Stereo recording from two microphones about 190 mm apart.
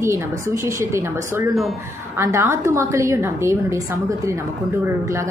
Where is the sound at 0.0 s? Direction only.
15° right (ahead or behind).